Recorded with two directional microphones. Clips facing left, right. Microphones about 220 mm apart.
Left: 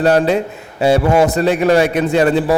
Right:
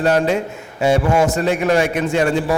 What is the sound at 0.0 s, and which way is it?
A man's voice, 35° left (ahead or behind).